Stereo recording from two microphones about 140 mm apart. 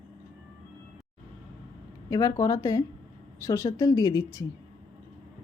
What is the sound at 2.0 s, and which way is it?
A woman's voice, 25° left (ahead or behind).